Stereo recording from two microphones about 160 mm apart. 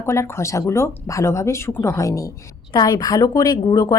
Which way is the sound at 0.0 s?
15° left (ahead or behind).